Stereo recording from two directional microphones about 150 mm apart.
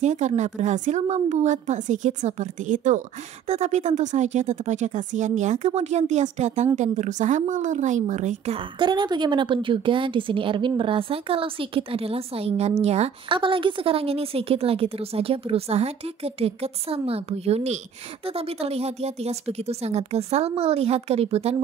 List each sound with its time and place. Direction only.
0.0 s speech: 50° right (ahead or behind)
3.4 s speech: 45° right (ahead or behind)
8.7 s a woman's voice: 30° right (ahead or behind)